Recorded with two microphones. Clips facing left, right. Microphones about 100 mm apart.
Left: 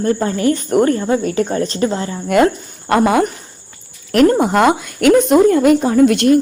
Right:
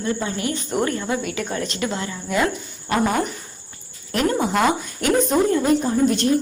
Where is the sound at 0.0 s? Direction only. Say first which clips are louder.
Left 9 dB; 45° left (ahead or behind).